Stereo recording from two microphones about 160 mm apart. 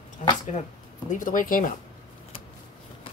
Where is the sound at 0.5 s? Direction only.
50° left (ahead or behind).